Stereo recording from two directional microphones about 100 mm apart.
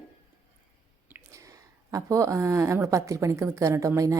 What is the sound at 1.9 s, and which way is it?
A woman's voice, 35° right (ahead or behind).